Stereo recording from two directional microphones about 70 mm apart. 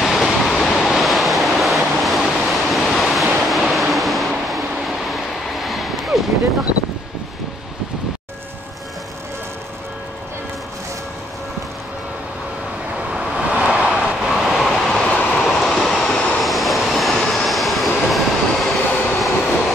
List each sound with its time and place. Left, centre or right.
0.0 s waves: centre
3.4 s vehicle: centre
13.1 s vehicle: centre
15.0 s vehicle: centre